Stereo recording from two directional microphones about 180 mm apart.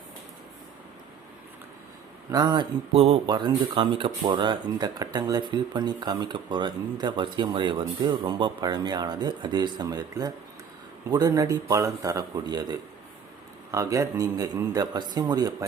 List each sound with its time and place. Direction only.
2.3 s speech: 20° right (ahead or behind)